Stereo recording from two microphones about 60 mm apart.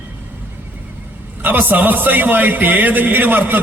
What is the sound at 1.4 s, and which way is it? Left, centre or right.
A man's voice, right.